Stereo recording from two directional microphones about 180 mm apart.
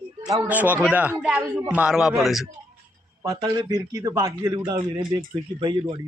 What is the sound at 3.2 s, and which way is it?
A man's voice, 20° right (ahead or behind).